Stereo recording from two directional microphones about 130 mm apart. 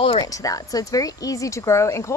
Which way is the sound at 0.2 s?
25° left (ahead or behind).